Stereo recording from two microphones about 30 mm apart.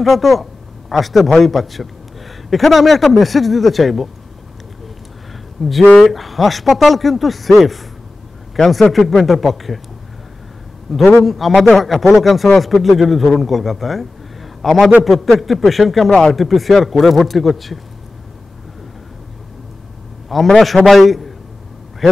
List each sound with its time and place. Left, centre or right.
0.0 s a man's voice: centre
5.6 s speech: centre
8.9 s speech: centre
10.9 s a man's voice: centre
16.1 s speech: left
16.3 s speech: centre
20.5 s speech: centre